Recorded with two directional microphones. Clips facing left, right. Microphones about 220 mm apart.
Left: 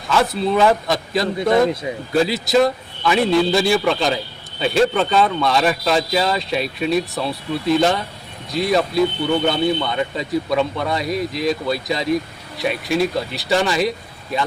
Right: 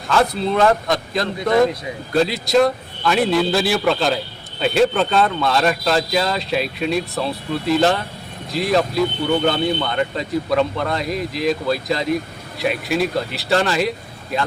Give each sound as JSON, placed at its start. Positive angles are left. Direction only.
{"t": 0.1, "sound": "a man's voice", "side_deg": 5}
{"t": 1.4, "sound": "speech", "side_deg": 25}
{"t": 2.1, "sound": "a man's voice", "side_deg": 0}